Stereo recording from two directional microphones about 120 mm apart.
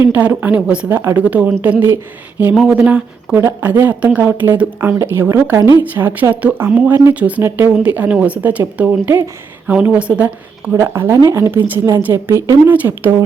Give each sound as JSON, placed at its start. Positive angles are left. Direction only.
{"t": 0.0, "sound": "a woman's voice", "side_deg": -15}